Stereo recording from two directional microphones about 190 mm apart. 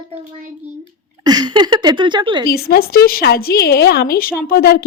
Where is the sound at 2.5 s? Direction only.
55° left (ahead or behind).